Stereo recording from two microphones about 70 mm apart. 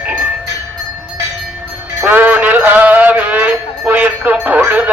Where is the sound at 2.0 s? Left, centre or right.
Right.